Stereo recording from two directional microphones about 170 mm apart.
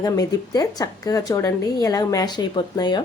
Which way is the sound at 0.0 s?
20° left (ahead or behind).